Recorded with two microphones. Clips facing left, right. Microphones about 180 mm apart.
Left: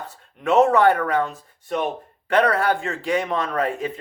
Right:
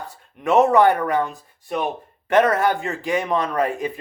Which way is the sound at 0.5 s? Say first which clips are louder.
Right 1 dB; 15° right (ahead or behind).